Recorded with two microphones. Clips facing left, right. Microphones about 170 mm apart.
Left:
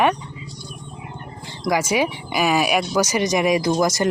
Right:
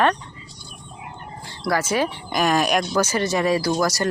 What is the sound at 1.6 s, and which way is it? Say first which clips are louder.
Speech: left 2 dB; 15° left (ahead or behind).